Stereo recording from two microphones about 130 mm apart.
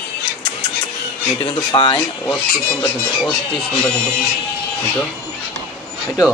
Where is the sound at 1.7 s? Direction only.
45° left (ahead or behind).